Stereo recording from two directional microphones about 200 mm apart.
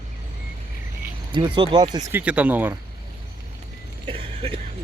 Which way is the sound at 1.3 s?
25° right (ahead or behind).